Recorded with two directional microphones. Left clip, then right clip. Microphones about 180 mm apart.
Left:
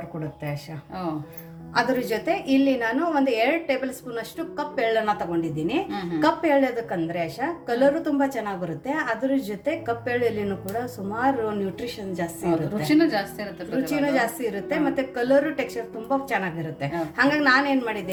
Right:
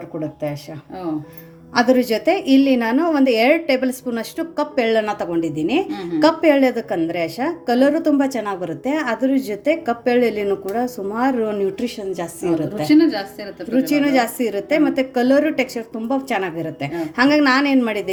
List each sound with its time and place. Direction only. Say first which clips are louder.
1.7 s a woman's voice: right 7 dB; 50° right (ahead or behind)
12.8 s a woman's voice: right 6 dB; 10° right (ahead or behind)
14.1 s a woman's voice: right 5 dB; 50° right (ahead or behind)